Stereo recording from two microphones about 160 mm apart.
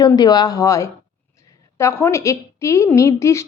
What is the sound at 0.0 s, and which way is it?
A woman's voice, 25° left (ahead or behind).